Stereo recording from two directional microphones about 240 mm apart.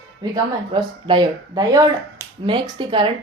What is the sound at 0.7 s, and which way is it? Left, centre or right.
Speech, centre.